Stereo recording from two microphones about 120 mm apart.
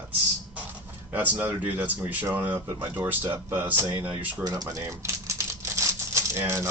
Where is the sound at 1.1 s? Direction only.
15° right (ahead or behind).